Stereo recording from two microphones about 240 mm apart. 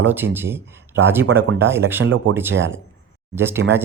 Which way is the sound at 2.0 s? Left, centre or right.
Right.